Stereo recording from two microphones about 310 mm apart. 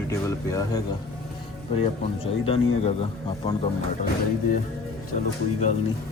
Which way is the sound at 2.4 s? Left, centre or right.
Centre.